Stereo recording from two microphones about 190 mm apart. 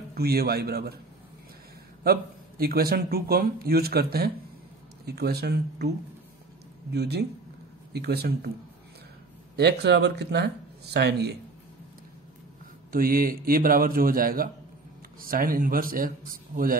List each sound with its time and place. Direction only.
0.1 s a man's voice: 55° right (ahead or behind)
2.0 s a man's voice: 55° right (ahead or behind)
9.6 s speech: 60° right (ahead or behind)
12.9 s a man's voice: 50° right (ahead or behind)